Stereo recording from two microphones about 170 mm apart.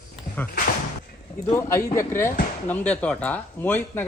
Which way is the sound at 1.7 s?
15° left (ahead or behind).